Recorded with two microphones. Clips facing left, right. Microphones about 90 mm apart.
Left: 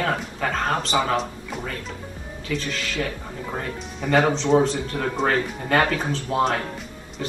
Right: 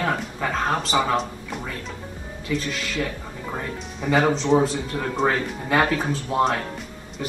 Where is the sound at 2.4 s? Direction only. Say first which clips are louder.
Right 1 dB; 10° right (ahead or behind).